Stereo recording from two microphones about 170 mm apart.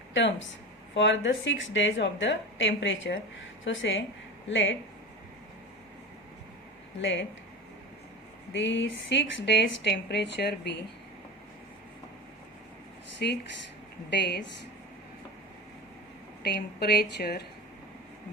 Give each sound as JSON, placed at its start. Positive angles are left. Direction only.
{"t": 0.1, "sound": "a woman's voice", "side_deg": 90}
{"t": 7.0, "sound": "a woman's voice", "side_deg": 90}
{"t": 8.5, "sound": "a woman's voice", "side_deg": 90}
{"t": 13.2, "sound": "a woman's voice", "side_deg": 70}
{"t": 16.4, "sound": "a woman's voice", "side_deg": 70}